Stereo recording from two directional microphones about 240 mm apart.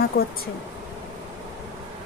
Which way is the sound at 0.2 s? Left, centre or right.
Left.